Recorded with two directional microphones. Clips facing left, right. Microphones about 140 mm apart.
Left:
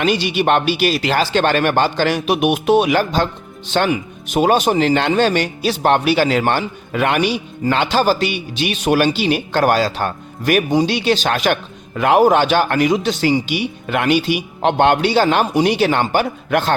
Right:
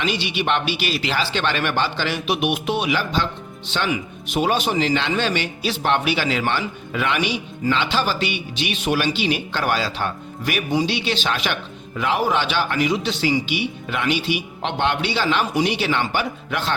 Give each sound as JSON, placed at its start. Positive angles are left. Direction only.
{"t": 0.0, "sound": "speech", "side_deg": 45}